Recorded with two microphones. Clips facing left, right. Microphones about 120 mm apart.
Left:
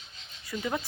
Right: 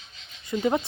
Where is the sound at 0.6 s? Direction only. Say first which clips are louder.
Right 8 dB; 25° right (ahead or behind).